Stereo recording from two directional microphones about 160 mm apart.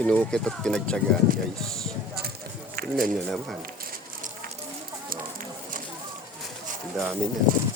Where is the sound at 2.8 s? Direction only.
60° right (ahead or behind).